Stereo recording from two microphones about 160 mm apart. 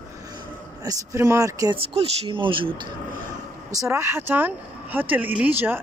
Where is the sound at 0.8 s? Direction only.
20° right (ahead or behind).